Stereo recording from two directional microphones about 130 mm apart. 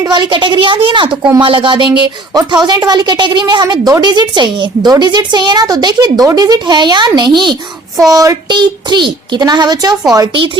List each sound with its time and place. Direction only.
0.0 s a woman's voice: 35° right (ahead or behind)
10.3 s a woman's voice: 40° right (ahead or behind)